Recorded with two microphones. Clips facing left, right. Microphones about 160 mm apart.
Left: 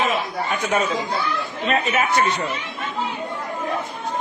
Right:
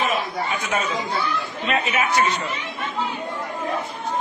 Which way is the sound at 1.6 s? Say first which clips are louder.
Left 2 dB; 45° left (ahead or behind).